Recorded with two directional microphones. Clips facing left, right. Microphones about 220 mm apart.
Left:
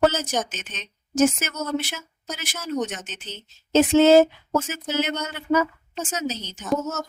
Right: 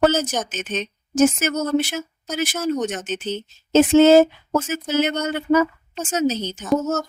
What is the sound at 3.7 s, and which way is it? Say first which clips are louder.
Speech: right 3 dB; 45° right (ahead or behind).